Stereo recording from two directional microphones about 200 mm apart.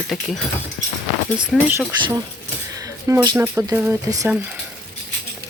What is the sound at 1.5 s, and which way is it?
Speech, 10° right (ahead or behind).